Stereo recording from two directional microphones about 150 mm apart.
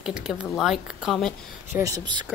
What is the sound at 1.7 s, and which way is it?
Speech, 20° right (ahead or behind).